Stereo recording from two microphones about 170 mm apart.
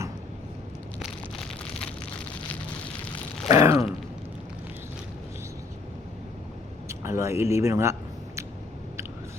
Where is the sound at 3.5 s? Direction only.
15° right (ahead or behind).